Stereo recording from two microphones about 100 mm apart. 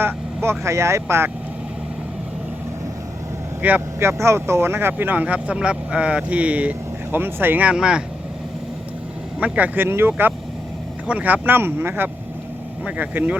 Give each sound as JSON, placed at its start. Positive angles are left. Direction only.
{"t": 0.4, "sound": "speech", "side_deg": -30}
{"t": 3.6, "sound": "speech", "side_deg": -15}
{"t": 4.2, "sound": "speech", "side_deg": -25}
{"t": 9.4, "sound": "speech", "side_deg": -20}